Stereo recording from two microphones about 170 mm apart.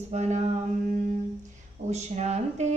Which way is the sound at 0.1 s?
40° right (ahead or behind).